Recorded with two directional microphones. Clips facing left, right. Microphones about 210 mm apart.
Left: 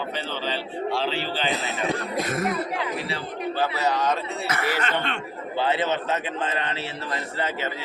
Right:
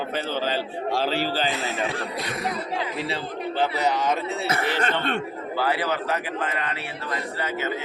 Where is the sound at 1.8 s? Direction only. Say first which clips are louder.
Left 3 dB; 45° left (ahead or behind).